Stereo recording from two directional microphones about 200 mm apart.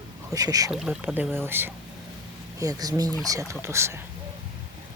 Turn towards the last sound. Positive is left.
turn(degrees=-15)  # may be behind; listen again after turning